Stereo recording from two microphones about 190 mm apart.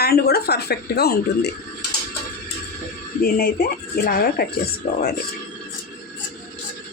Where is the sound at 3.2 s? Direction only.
55° left (ahead or behind).